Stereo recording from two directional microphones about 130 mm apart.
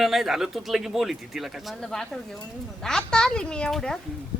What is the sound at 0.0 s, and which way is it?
Speech, centre (ahead or behind).